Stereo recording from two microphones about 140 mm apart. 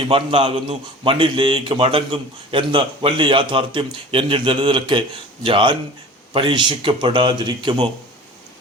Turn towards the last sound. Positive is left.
turn(degrees=-35)  # may be behind; listen again after turning